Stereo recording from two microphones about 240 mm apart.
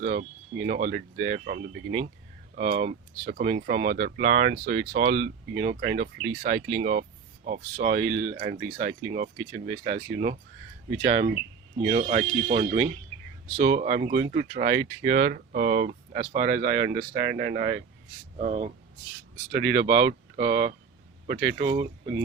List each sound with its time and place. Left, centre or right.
0.0 s speech: right
19.7 s speech: right